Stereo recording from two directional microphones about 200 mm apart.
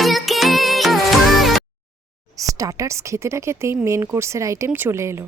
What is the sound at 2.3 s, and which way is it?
A woman's voice, 15° right (ahead or behind).